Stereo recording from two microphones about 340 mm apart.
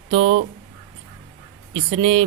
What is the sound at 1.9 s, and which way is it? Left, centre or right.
Speech, centre.